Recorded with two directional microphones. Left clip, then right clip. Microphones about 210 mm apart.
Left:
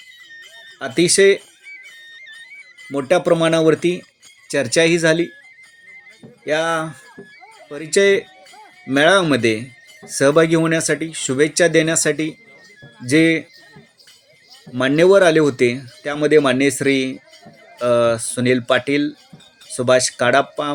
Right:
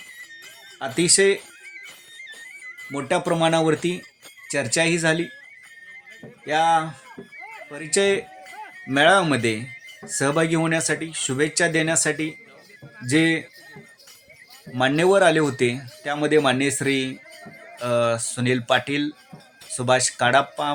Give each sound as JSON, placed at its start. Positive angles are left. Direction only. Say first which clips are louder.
{"t": 0.8, "sound": "speech", "louder": "left 5 dB", "side_deg": 15}
{"t": 2.9, "sound": "speech", "louder": "left 7 dB", "side_deg": 15}
{"t": 6.4, "sound": "speech", "louder": "even", "side_deg": 15}
{"t": 14.7, "sound": "speech", "louder": "left 5 dB", "side_deg": 15}